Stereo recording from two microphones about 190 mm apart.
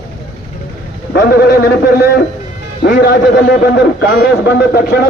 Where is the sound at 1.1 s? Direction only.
55° left (ahead or behind).